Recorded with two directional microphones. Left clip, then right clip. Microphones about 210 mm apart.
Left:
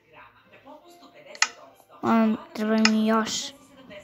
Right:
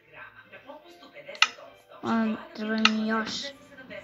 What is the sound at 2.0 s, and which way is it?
Speech, 55° left (ahead or behind).